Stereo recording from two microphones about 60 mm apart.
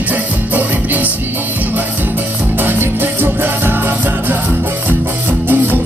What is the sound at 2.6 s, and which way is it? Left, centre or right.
Music, right.